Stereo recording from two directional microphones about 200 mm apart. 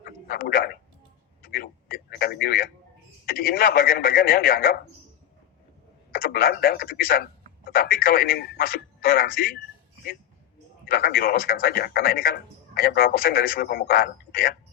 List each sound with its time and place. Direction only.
0.0 s speech: 50° left (ahead or behind)
1.4 s a sound: 50° left (ahead or behind)
3.2 s a man's voice: 45° left (ahead or behind)
6.1 s speech: 45° left (ahead or behind)
10.8 s a man's voice: 50° left (ahead or behind)